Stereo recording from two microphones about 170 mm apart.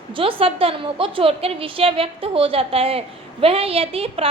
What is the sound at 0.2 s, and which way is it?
A woman's voice, 35° right (ahead or behind).